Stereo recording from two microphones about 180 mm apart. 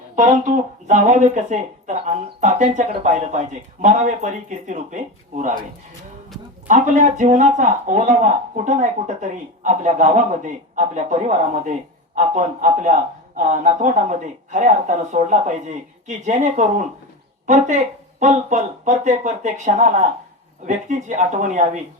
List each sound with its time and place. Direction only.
0.2 s speech: 45° right (ahead or behind)
6.7 s speech: 45° right (ahead or behind)
13.3 s speech: 40° right (ahead or behind)